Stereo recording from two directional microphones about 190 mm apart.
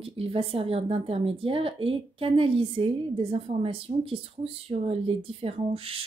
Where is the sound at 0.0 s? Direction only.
30° right (ahead or behind).